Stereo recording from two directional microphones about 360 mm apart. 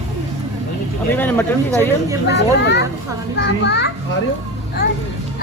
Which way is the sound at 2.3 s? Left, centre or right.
Left.